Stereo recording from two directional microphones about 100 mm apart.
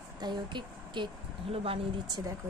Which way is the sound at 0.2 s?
50° right (ahead or behind).